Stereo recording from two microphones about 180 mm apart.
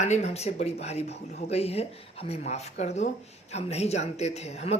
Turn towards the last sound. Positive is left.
turn(degrees=35)  # may be behind; listen again after turning